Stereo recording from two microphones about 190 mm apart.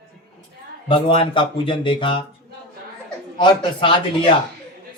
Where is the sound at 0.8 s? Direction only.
25° left (ahead or behind).